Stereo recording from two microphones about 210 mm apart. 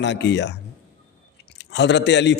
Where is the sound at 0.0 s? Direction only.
55° left (ahead or behind).